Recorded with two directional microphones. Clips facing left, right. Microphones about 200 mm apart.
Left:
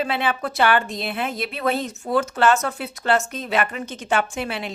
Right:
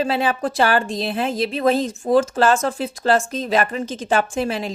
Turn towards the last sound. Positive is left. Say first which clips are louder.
# right 5 dB
turn(degrees=-35)  # may be behind; listen again after turning